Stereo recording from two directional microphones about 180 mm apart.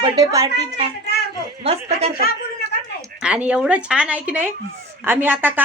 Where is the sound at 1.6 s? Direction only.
35° right (ahead or behind).